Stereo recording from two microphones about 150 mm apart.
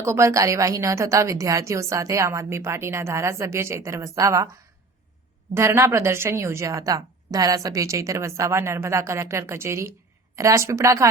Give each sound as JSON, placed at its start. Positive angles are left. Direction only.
{"t": 0.0, "sound": "a woman's voice", "side_deg": -20}
{"t": 5.5, "sound": "a woman's voice", "side_deg": -20}